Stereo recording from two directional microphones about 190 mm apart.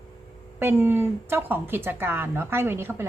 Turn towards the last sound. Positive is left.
turn(degrees=-10)  # may be behind; listen again after turning